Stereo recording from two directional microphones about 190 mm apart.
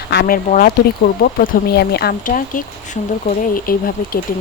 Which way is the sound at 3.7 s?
50° left (ahead or behind).